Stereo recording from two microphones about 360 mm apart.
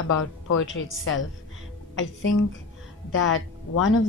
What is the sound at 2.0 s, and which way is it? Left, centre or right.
A woman's voice, left.